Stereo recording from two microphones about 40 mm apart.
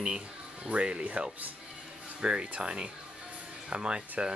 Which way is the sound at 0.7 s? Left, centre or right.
Right.